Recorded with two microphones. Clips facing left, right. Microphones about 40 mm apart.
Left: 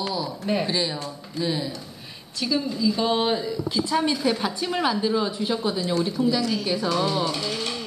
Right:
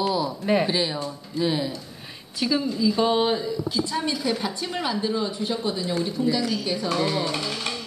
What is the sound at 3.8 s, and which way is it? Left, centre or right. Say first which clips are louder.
A woman's voice: left 3 dB; left.